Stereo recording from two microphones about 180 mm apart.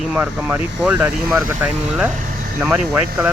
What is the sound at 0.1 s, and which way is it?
Speech, 10° right (ahead or behind).